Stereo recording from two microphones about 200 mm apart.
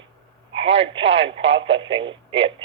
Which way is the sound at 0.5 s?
30° right (ahead or behind).